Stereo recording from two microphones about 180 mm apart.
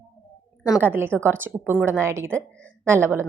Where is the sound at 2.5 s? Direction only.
5° left (ahead or behind).